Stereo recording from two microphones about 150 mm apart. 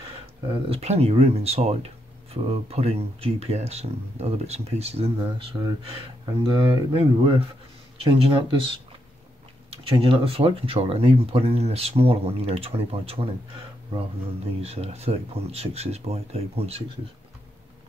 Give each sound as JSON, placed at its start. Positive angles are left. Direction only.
{"t": 0.7, "sound": "speech", "side_deg": -45}
{"t": 6.4, "sound": "speech", "side_deg": -35}